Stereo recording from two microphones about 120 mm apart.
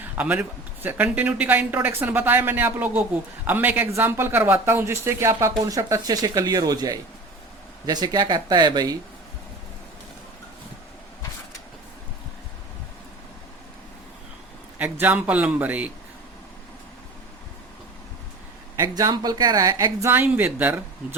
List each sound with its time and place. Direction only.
0.0 s a woman's voice: 10° right (ahead or behind); by 9.0 s 35° right (ahead or behind)
14.8 s speech: 15° right (ahead or behind)
18.8 s a woman's voice: 30° right (ahead or behind)
20.1 s speech: 15° right (ahead or behind)